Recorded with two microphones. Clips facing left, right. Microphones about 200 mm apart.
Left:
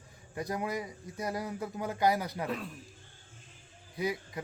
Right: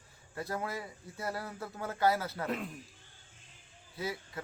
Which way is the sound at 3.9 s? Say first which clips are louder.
Left 5 dB; 15° left (ahead or behind).